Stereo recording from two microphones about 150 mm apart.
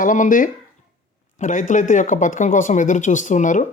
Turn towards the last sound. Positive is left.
turn(degrees=55)  # may be behind; listen again after turning